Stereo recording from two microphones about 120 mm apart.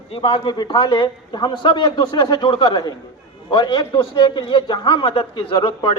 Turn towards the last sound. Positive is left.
turn(degrees=45)  # may be behind; listen again after turning